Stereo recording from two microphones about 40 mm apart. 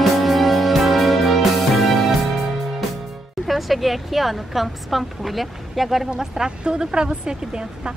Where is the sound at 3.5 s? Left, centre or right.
Centre.